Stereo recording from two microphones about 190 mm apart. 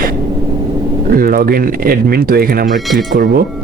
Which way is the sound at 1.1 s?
50° right (ahead or behind).